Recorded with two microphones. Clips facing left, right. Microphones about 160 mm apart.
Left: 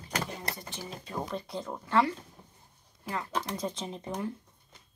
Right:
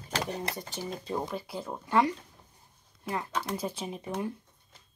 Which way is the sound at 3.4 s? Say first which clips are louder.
Right 1 dB; 10° right (ahead or behind).